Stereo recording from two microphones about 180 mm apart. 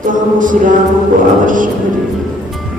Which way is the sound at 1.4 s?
45° right (ahead or behind).